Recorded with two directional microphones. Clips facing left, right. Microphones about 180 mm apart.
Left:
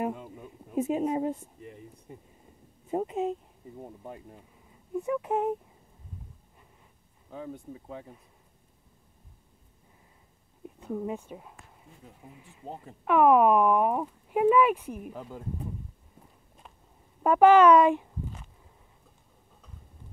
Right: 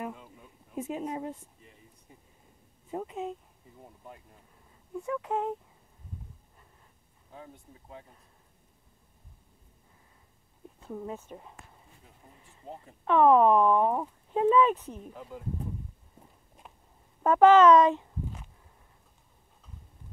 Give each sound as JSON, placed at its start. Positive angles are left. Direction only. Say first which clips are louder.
{"t": 0.0, "sound": "speech", "louder": "left 7 dB", "side_deg": 55}
{"t": 2.9, "sound": "speech", "louder": "left 6 dB", "side_deg": 50}
{"t": 4.9, "sound": "speech", "louder": "left 3 dB", "side_deg": 20}
{"t": 10.8, "sound": "speech", "louder": "left 5 dB", "side_deg": 10}
{"t": 17.2, "sound": "speech", "louder": "even", "side_deg": 15}